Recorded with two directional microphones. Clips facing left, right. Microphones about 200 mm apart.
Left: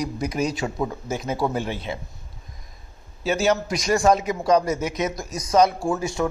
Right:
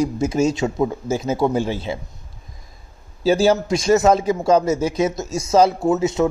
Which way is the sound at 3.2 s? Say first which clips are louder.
Right 5 dB; 30° right (ahead or behind).